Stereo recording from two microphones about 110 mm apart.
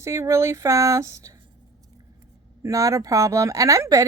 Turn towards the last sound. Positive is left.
turn(degrees=-30)  # may be behind; listen again after turning